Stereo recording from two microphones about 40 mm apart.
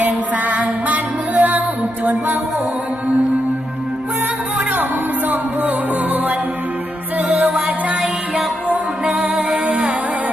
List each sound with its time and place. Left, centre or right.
0.0 s music: right
7.3 s music: right
8.7 s music: right